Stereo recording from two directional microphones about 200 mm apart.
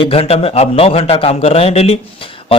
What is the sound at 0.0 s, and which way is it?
A man's voice, 30° left (ahead or behind).